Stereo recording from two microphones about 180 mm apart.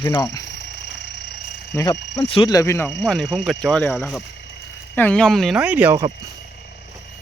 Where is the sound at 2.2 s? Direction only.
30° left (ahead or behind).